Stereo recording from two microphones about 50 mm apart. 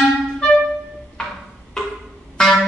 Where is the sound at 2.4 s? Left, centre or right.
Centre.